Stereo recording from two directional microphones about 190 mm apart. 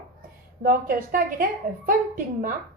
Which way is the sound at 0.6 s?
45° right (ahead or behind).